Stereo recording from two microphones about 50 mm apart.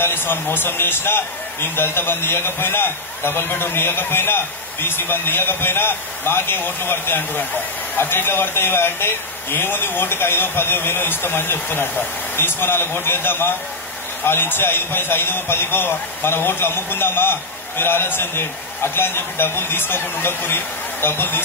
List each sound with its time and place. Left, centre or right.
0.0 s a man's voice: left